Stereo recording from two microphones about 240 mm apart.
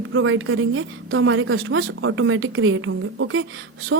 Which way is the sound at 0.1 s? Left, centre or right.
Right.